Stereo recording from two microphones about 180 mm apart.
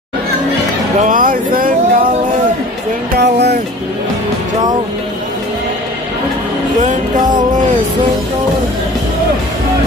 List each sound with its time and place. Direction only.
1.0 s music: 50° right (ahead or behind)
3.2 s music: 70° right (ahead or behind)
6.8 s music: 45° right (ahead or behind)